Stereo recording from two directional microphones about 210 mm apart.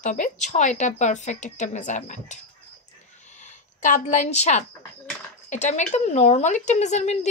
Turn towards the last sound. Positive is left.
turn(degrees=35)  # may be behind; listen again after turning